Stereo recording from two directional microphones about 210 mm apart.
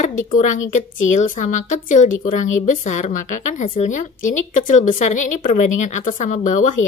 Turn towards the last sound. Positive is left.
turn(degrees=35)  # may be behind; listen again after turning